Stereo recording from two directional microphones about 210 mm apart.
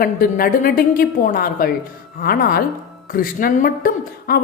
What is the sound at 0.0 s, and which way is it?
A woman's voice, 45° left (ahead or behind).